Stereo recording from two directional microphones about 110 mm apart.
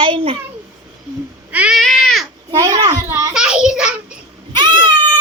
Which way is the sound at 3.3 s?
5° right (ahead or behind).